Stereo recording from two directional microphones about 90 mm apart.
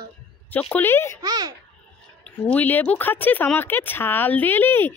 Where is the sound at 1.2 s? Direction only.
50° right (ahead or behind).